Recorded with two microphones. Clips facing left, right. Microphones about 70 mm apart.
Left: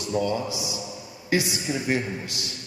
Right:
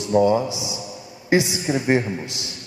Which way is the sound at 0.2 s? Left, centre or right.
Right.